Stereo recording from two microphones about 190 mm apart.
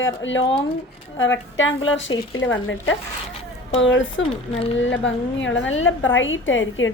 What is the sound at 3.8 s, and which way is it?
A woman's voice, 75° left (ahead or behind).